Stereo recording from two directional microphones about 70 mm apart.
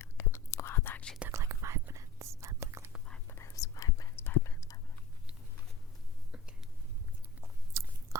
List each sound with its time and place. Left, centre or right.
0.0 s whispering: left
1.3 s whispering: right
3.2 s whispering: left
3.5 s whispering: left
4.1 s whispering: left
6.3 s whispering: centre
7.4 s chewing: right